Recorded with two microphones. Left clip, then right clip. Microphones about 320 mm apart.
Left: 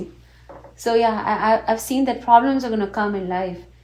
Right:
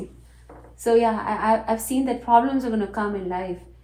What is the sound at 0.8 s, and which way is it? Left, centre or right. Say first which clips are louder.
A woman's voice: left 1 dB; left.